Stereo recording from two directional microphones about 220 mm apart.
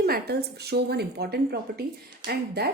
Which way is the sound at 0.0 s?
45° right (ahead or behind).